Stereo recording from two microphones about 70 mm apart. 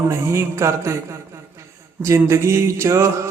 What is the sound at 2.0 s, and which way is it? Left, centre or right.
A man's voice, right.